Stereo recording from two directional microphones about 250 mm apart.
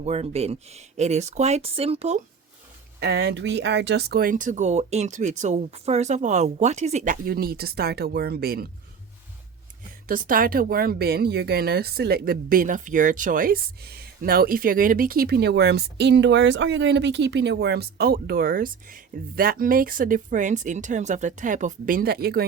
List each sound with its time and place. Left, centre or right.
0.0 s speech: right
3.0 s speech: right
10.1 s speech: right